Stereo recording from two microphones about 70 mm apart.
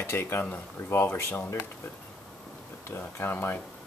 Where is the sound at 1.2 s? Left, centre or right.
Left.